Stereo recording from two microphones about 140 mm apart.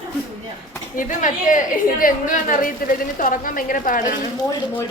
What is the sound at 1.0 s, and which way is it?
A woman's voice, 70° left (ahead or behind).